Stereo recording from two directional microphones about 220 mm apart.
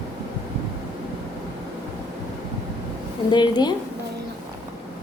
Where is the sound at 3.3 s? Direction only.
20° left (ahead or behind).